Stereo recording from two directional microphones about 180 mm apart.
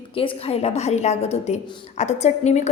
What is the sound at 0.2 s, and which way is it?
A woman's voice, 30° left (ahead or behind).